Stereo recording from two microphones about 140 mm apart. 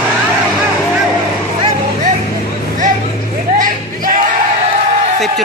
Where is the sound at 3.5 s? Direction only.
75° right (ahead or behind).